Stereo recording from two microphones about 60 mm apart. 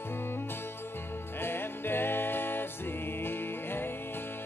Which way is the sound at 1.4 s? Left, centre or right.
Left.